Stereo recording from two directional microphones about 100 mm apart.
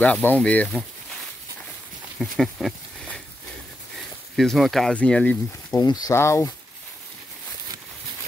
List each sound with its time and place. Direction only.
0.0 s speech: 15° left (ahead or behind)
2.1 s speech: centre (ahead or behind)
4.4 s speech: centre (ahead or behind)
4.9 s speech: 15° left (ahead or behind)
5.8 s speech: 40° left (ahead or behind)
6.1 s speech: 30° left (ahead or behind)